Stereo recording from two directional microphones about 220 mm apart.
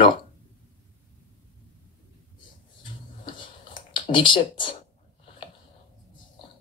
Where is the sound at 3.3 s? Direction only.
20° left (ahead or behind).